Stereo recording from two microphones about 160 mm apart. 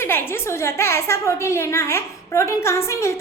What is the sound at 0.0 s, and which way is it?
A woman's voice, 15° left (ahead or behind).